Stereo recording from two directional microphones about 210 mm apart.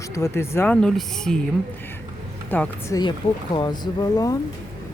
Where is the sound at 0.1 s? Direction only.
15° left (ahead or behind).